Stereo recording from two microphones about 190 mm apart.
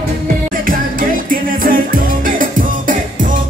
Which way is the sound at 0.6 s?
45° right (ahead or behind).